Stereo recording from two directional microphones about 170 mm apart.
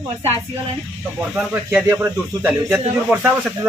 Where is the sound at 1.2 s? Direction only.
5° right (ahead or behind).